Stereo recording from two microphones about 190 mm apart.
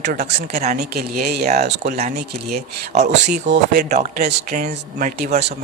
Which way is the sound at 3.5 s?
65° right (ahead or behind).